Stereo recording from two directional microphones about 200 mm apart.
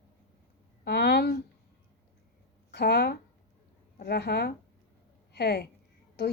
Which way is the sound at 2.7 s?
55° left (ahead or behind).